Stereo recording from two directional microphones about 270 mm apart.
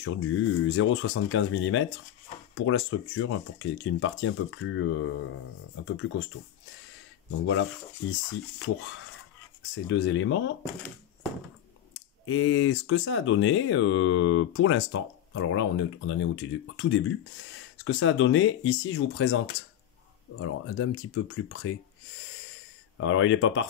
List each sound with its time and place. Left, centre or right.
0.0 s speech: left
7.2 s speech: left
9.8 s speech: left
12.3 s speech: left
22.9 s speech: left